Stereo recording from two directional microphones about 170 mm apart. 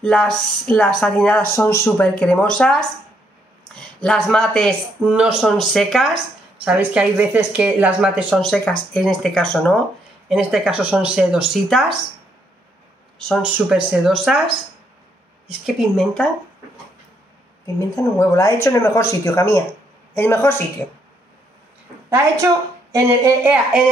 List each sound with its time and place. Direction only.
0.0 s speech: 5° left (ahead or behind)
13.2 s speech: centre (ahead or behind)
15.6 s speech: centre (ahead or behind)
17.7 s speech: 20° left (ahead or behind)
22.9 s speech: 15° right (ahead or behind)